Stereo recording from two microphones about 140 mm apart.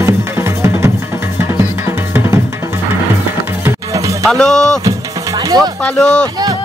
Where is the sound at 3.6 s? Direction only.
20° right (ahead or behind).